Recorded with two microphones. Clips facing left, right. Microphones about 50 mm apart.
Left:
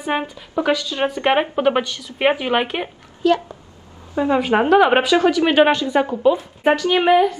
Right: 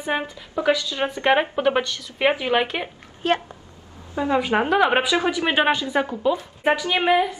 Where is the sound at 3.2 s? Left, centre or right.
Right.